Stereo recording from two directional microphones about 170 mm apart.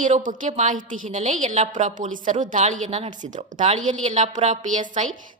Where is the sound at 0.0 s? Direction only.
50° right (ahead or behind).